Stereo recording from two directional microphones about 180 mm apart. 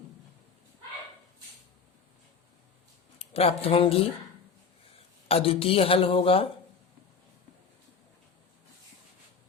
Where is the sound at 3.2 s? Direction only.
35° left (ahead or behind).